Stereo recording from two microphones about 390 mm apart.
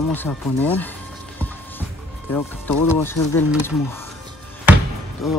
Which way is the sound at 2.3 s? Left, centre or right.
Centre.